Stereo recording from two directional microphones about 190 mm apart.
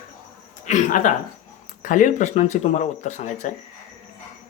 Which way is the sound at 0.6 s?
40° left (ahead or behind).